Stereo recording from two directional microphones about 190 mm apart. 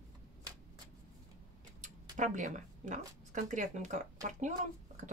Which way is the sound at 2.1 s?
40° right (ahead or behind).